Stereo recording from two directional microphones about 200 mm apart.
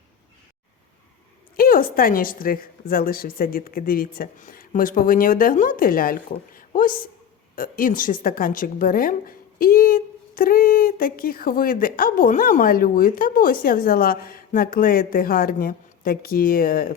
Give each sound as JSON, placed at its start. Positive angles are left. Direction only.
{"t": 1.5, "sound": "a woman's voice", "side_deg": 45}
{"t": 6.5, "sound": "a sound", "side_deg": 45}
{"t": 7.5, "sound": "a woman's voice", "side_deg": 45}